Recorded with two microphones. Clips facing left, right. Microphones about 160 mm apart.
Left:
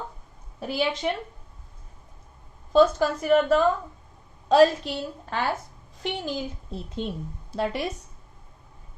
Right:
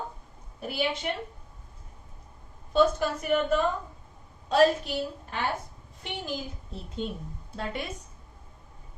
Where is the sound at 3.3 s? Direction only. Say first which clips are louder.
Left 6 dB; 90° left.